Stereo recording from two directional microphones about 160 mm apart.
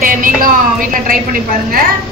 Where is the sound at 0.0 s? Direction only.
60° right (ahead or behind).